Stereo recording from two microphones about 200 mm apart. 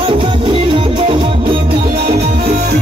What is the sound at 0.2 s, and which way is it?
Music, 25° right (ahead or behind).